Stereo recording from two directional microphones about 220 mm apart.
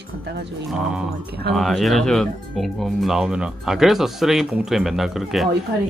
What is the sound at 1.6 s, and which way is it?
Speech, centre (ahead or behind).